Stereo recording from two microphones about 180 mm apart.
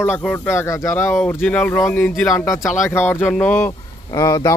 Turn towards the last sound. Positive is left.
turn(degrees=20)  # may be behind; listen again after turning